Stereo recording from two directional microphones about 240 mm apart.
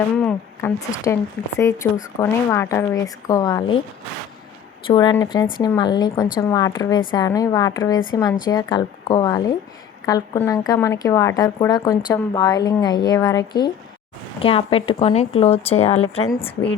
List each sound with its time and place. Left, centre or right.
0.2 s a woman's voice: centre
4.9 s a woman's voice: centre